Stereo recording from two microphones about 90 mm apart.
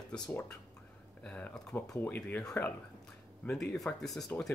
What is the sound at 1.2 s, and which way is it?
Speech, 15° left (ahead or behind).